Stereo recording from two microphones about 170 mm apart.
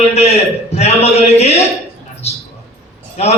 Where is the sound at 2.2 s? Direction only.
40° left (ahead or behind).